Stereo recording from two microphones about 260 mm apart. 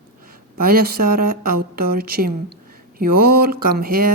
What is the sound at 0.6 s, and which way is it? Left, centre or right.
Speech, right.